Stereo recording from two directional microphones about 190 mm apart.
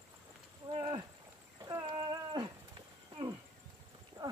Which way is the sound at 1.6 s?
20° right (ahead or behind).